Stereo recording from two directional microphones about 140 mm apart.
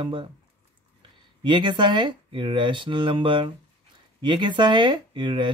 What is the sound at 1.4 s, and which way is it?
Speech, 35° right (ahead or behind).